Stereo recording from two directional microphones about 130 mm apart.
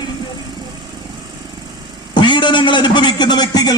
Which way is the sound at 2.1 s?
35° left (ahead or behind).